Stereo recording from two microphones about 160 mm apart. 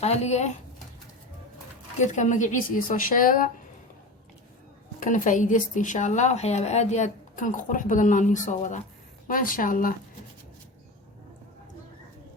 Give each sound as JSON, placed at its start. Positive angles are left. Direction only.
{"t": 0.0, "sound": "a woman's voice", "side_deg": 40}
{"t": 2.0, "sound": "a woman's voice", "side_deg": 50}
{"t": 4.9, "sound": "a woman's voice", "side_deg": 55}